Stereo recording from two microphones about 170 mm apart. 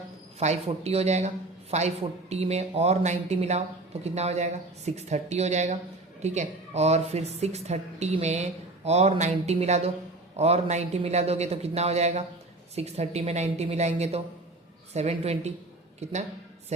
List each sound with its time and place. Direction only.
0.3 s speech: 40° right (ahead or behind)